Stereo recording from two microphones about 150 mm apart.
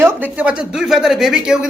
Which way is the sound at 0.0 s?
15° right (ahead or behind).